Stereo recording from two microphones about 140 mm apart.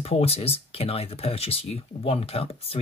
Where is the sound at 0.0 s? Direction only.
45° left (ahead or behind).